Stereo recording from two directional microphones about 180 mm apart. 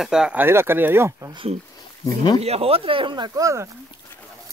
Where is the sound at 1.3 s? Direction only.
30° right (ahead or behind).